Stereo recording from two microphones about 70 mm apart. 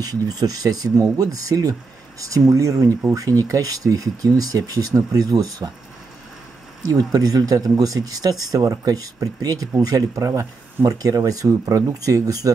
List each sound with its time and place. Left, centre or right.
0.0 s speech: right
6.9 s speech: right